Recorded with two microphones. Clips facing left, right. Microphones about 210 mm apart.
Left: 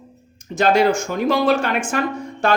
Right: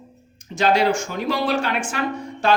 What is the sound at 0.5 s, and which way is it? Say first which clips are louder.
A man's voice: left 3 dB; 50° left (ahead or behind).